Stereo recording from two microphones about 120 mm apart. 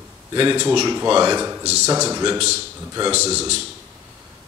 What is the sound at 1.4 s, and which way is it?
Speech, 25° right (ahead or behind).